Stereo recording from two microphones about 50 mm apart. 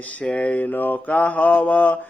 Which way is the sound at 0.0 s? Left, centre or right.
Left.